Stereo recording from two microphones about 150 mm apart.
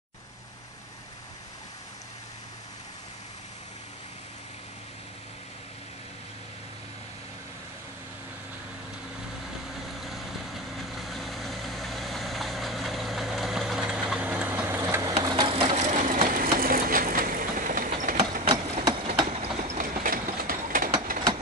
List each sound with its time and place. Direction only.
9.9 s vehicle: centre (ahead or behind); by 15.1 s 20° right (ahead or behind)
15.2 s sewing machine: 25° right (ahead or behind)
15.5 s a sound: 45° right (ahead or behind); by 18.1 s 65° right (ahead or behind)
18.5 s engine: 40° right (ahead or behind)
19.2 s train: 45° right (ahead or behind)
19.8 s train: 65° right (ahead or behind)